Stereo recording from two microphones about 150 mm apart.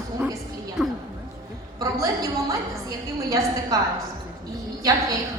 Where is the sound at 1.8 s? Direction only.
20° right (ahead or behind).